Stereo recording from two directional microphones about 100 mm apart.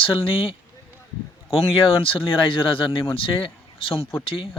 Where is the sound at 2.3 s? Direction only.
60° left (ahead or behind).